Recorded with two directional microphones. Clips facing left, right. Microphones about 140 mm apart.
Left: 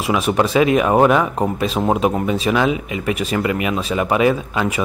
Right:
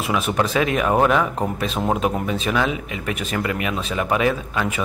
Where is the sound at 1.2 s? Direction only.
35° left (ahead or behind).